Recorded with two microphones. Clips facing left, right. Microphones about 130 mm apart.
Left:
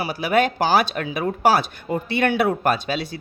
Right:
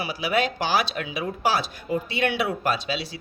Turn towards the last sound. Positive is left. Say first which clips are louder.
# left 4 dB
turn(degrees=50)  # may be behind; listen again after turning